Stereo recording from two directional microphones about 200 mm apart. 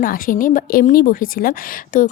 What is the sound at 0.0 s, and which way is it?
A woman's voice, 45° left (ahead or behind).